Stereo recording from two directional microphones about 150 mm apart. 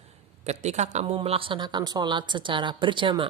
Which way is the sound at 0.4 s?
50° right (ahead or behind).